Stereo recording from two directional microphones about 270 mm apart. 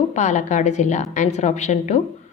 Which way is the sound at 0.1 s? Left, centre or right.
Left.